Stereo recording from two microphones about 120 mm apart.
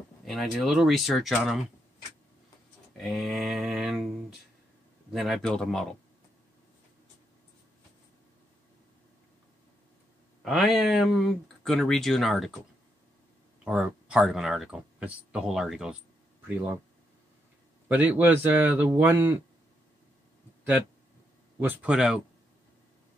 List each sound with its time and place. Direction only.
0.2 s speech: centre (ahead or behind)
3.0 s a sound: centre (ahead or behind)
5.1 s speech: centre (ahead or behind)
10.4 s speech: centre (ahead or behind)
13.7 s speech: 10° right (ahead or behind)
16.4 s speech: 15° right (ahead or behind)
17.8 s speech: 15° right (ahead or behind)
21.5 s speech: 10° right (ahead or behind)